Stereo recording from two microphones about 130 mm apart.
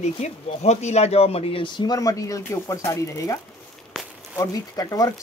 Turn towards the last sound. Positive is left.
turn(degrees=25)  # may be behind; listen again after turning